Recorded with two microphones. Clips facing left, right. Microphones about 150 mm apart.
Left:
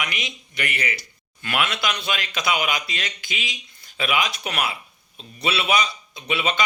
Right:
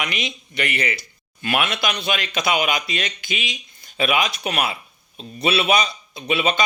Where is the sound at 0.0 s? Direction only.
25° right (ahead or behind).